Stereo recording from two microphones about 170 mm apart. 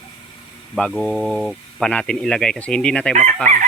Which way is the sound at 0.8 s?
5° left (ahead or behind).